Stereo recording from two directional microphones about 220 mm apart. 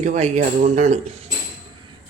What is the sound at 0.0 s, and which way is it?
Speech, 30° right (ahead or behind).